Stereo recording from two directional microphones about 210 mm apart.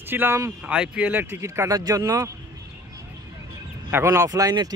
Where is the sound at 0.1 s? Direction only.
10° right (ahead or behind).